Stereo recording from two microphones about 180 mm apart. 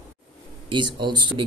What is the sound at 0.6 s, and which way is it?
Speech, 25° right (ahead or behind).